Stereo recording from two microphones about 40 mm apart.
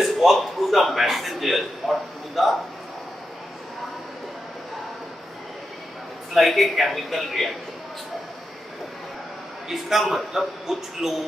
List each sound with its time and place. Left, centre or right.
0.0 s a man's voice: centre
6.3 s speech: centre
9.7 s a man's voice: centre